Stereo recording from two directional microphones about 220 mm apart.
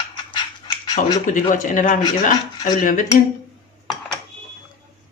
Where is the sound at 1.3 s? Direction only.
35° left (ahead or behind).